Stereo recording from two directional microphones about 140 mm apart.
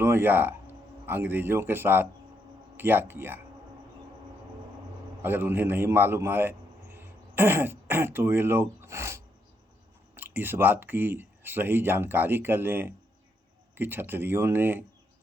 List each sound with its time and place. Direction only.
0.0 s speech: 15° right (ahead or behind)
5.2 s a man's voice: 15° right (ahead or behind)